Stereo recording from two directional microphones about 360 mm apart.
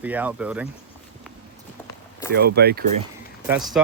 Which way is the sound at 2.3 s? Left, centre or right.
Right.